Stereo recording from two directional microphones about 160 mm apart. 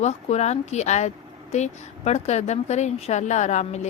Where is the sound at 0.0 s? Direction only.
45° left (ahead or behind).